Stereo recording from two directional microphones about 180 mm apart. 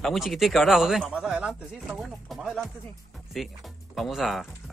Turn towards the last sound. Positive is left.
turn(degrees=0)  # may be behind; listen again after turning